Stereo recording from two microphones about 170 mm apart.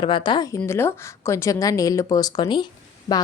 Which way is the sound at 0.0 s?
30° left (ahead or behind).